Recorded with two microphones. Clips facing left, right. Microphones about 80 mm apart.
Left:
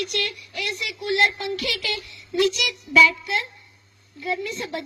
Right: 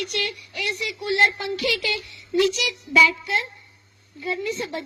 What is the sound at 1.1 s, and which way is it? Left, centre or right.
Speech, right.